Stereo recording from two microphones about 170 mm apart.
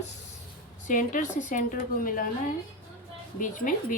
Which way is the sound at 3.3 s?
50° left (ahead or behind).